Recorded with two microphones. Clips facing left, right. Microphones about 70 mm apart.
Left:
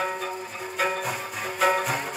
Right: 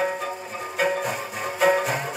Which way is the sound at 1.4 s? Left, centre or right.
Right.